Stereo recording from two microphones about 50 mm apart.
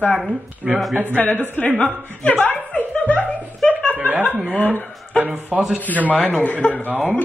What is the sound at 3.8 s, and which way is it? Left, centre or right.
Chuckle, right.